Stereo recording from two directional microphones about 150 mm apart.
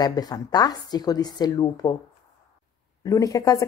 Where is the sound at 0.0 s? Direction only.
25° left (ahead or behind).